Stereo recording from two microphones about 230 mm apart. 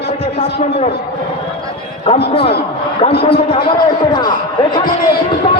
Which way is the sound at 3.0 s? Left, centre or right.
Left.